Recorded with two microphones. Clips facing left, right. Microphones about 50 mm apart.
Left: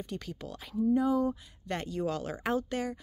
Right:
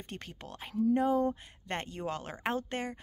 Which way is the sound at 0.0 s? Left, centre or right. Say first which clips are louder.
Left 5 dB; right.